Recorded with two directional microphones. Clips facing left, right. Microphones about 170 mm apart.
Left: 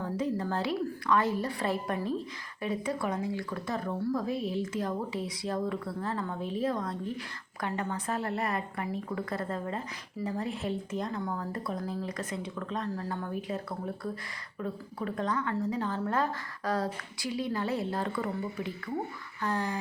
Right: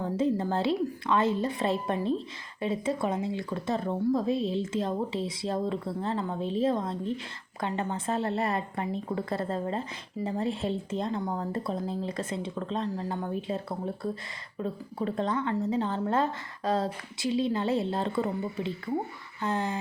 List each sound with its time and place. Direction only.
0.0 s speech: 25° right (ahead or behind)